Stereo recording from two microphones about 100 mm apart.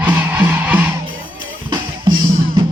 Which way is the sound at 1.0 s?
50° right (ahead or behind).